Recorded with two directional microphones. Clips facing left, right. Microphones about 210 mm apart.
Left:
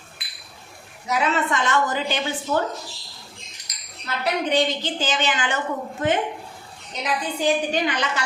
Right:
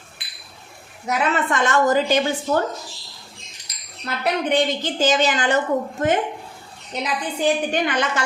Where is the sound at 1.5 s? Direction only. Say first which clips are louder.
Right 5 dB; 45° right (ahead or behind).